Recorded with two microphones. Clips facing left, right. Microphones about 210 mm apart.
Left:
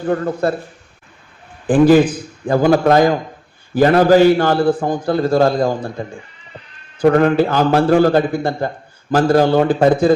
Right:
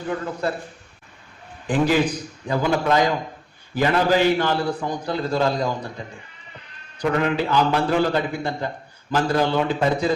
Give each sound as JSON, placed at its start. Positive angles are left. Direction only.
{"t": 0.0, "sound": "a man's voice", "side_deg": 45}
{"t": 1.6, "sound": "a man's voice", "side_deg": 50}